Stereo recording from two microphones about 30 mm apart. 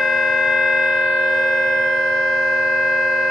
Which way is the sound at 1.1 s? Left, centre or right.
Centre.